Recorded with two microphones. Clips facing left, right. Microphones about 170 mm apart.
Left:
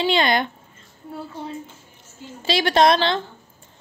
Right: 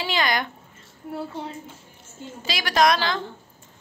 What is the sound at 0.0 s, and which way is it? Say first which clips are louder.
Speech: left 5 dB; 25° left (ahead or behind).